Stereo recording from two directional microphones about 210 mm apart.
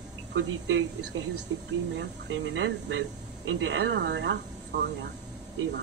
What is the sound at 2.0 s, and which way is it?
Speech, 60° right (ahead or behind).